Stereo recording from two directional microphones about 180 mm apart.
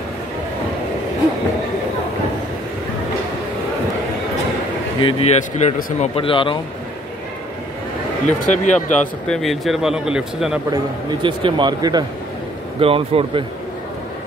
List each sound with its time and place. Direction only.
5.0 s speech: 35° left (ahead or behind)
6.1 s speech: 30° left (ahead or behind)
8.3 s speech: 45° left (ahead or behind)
9.3 s speech: centre (ahead or behind)
11.2 s speech: 25° right (ahead or behind)